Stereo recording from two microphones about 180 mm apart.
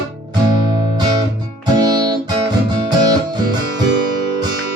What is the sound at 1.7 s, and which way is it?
Music, 20° right (ahead or behind).